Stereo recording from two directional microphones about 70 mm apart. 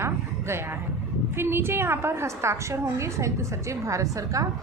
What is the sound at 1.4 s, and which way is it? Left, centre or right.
A woman's voice, right.